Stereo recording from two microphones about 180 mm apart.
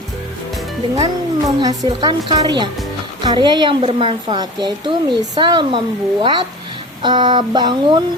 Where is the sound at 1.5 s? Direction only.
20° right (ahead or behind).